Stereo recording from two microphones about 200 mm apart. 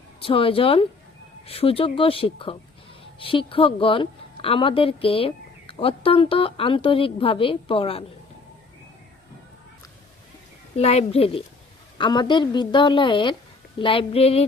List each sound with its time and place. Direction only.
0.2 s a woman's voice: 25° left (ahead or behind)
10.8 s a woman's voice: 30° left (ahead or behind)